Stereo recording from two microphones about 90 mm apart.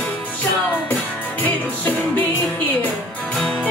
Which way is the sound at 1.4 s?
20° left (ahead or behind).